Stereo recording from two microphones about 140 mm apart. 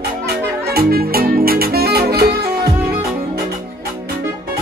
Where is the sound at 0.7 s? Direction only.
90° right.